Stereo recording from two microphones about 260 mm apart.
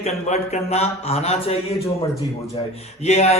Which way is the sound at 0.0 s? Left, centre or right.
Left.